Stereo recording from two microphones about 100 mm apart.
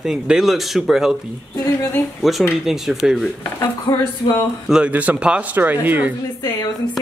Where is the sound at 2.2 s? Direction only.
Centre (ahead or behind).